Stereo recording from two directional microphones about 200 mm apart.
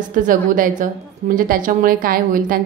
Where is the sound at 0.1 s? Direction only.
40° right (ahead or behind).